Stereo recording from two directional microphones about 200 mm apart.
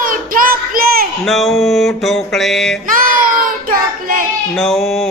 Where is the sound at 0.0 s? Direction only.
45° right (ahead or behind).